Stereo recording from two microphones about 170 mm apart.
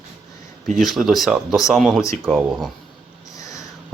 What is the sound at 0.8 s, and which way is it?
Speech, centre (ahead or behind).